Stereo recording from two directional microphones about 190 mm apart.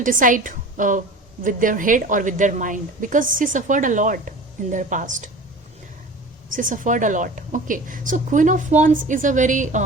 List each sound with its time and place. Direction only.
0.0 s a woman's voice: 45° right (ahead or behind)
6.5 s a woman's voice: 45° right (ahead or behind)